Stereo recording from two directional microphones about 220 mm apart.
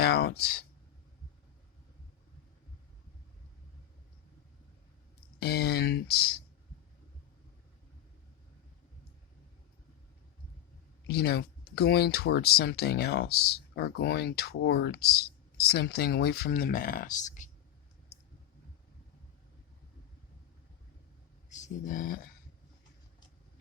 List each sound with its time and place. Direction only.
0.0 s a sound: 45° left (ahead or behind)
5.4 s speech: 45° left (ahead or behind)
11.1 s speech: 45° left (ahead or behind)
21.5 s speech: 35° left (ahead or behind)